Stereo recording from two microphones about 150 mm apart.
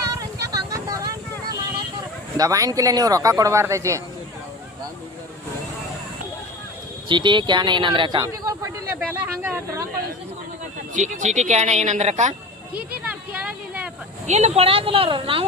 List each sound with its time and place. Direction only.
0.1 s vehicle: 25° right (ahead or behind)
2.4 s speech: 25° right (ahead or behind)
7.1 s a woman's voice: 30° right (ahead or behind)
8.2 s speech: 20° right (ahead or behind)
10.9 s speech: 55° right (ahead or behind)
12.7 s a sound: 10° right (ahead or behind)
14.3 s a woman's voice: 45° right (ahead or behind)